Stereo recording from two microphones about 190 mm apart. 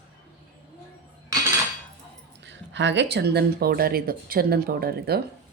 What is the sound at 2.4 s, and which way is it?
Speech, 70° right (ahead or behind).